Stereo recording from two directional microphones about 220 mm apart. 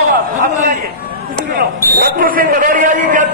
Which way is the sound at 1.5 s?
45° right (ahead or behind).